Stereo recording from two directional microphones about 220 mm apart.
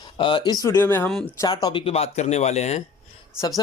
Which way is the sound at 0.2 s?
20° left (ahead or behind).